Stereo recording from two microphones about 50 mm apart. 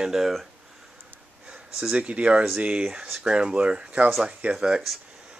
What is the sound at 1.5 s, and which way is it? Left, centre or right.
Speech, centre.